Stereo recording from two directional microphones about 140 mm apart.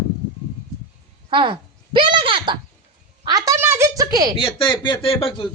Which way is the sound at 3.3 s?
25° right (ahead or behind).